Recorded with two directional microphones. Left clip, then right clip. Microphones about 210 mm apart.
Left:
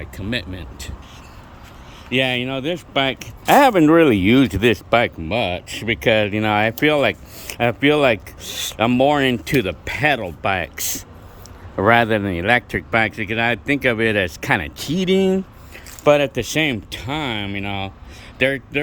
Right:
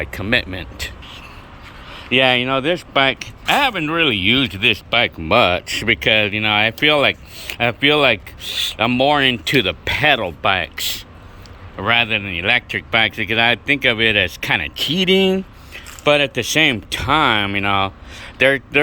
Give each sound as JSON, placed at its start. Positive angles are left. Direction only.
{"t": 0.0, "sound": "speech", "side_deg": 5}
{"t": 2.0, "sound": "speech", "side_deg": 5}
{"t": 3.2, "sound": "speech", "side_deg": 25}
{"t": 5.2, "sound": "speech", "side_deg": 10}
{"t": 11.8, "sound": "speech", "side_deg": 30}